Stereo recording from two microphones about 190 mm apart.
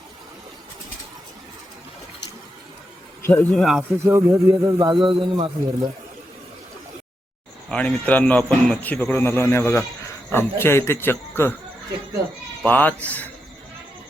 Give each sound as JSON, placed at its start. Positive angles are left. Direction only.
{"t": 3.2, "sound": "speech", "side_deg": 5}
{"t": 4.0, "sound": "a man's voice", "side_deg": -15}
{"t": 7.7, "sound": "speech", "side_deg": 5}
{"t": 12.6, "sound": "speech", "side_deg": 10}